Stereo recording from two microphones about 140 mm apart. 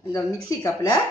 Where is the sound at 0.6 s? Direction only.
25° left (ahead or behind).